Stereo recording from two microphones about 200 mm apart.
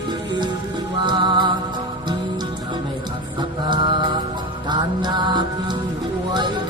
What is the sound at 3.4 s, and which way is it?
Music, 20° right (ahead or behind).